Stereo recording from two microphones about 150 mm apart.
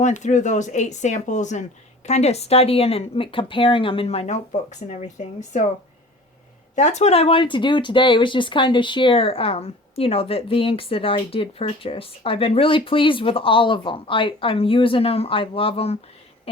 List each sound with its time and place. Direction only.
0.0 s speech: 55° left (ahead or behind)
6.7 s speech: 50° left (ahead or behind)